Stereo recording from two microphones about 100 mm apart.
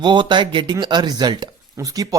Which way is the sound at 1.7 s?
35° right (ahead or behind).